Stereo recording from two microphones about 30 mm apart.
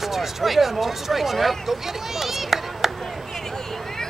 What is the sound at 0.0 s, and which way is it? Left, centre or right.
A child's voice, centre.